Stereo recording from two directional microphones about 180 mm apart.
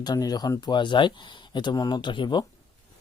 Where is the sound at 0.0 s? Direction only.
20° left (ahead or behind).